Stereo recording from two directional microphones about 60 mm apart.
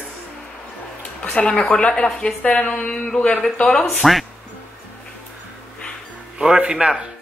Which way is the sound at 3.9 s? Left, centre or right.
Centre.